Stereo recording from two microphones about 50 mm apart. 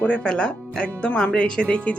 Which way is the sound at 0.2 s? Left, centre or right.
Centre.